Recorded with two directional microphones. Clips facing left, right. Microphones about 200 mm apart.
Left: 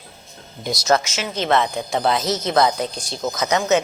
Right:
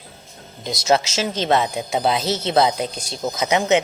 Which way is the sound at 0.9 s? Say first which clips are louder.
Right 1 dB; 25° right (ahead or behind).